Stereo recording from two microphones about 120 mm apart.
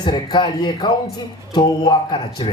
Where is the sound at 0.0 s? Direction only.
40° left (ahead or behind).